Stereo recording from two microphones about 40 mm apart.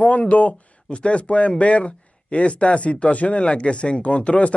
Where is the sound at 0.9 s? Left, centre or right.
Left.